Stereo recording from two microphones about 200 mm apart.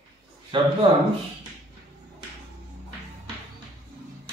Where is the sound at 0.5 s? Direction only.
25° right (ahead or behind).